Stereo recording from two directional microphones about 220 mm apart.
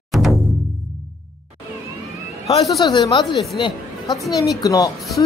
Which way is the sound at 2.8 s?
20° left (ahead or behind).